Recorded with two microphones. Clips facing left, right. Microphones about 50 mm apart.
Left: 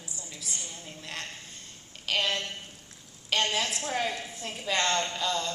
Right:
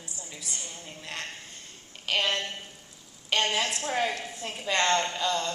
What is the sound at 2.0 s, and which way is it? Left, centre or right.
Speech, centre.